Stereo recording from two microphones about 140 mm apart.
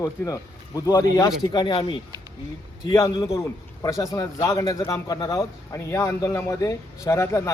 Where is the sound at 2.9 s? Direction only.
20° left (ahead or behind).